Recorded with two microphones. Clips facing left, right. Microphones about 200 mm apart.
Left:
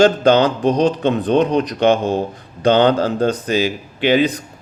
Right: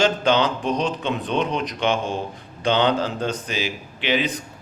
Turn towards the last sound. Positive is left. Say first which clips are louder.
# left 8 dB
turn(degrees=45)  # may be behind; listen again after turning